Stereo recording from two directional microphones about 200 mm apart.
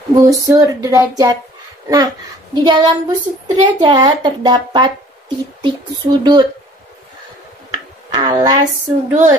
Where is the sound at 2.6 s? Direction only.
25° right (ahead or behind).